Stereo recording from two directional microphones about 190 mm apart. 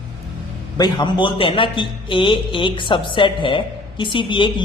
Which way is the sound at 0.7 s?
20° left (ahead or behind).